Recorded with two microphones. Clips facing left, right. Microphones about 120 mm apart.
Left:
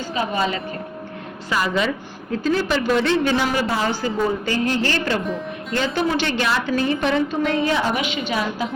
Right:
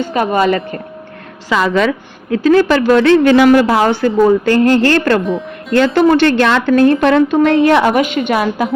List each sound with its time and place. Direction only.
0.0 s a woman's voice: 60° right (ahead or behind)
1.5 s a woman's voice: 90° right; by 8.0 s 70° right (ahead or behind)
8.0 s a woman's voice: 55° right (ahead or behind)